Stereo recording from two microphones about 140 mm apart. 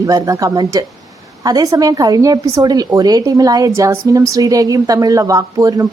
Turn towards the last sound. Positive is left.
turn(degrees=-25)  # may be behind; listen again after turning